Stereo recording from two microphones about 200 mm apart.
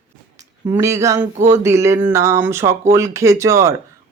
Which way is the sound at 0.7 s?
15° right (ahead or behind).